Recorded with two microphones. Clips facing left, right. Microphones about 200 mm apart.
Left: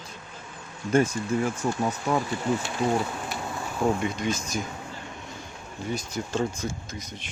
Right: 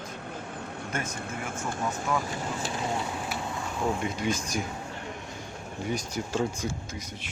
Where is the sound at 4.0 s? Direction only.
10° right (ahead or behind).